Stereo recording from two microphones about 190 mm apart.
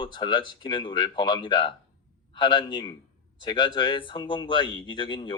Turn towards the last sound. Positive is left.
turn(degrees=25)  # may be behind; listen again after turning